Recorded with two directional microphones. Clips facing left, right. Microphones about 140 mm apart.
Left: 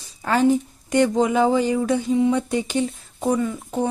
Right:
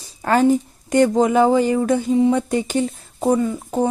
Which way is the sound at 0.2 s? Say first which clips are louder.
Right 2 dB; 45° right (ahead or behind).